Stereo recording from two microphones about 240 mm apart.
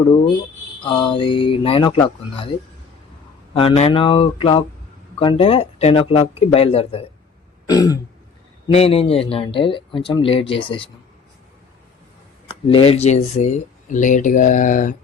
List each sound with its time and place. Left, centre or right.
0.8 s speech: centre
3.5 s speech: left
7.7 s throat clearing: centre
8.6 s speech: left
12.6 s speech: left